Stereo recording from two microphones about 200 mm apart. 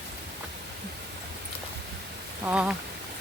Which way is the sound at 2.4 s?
5° right (ahead or behind).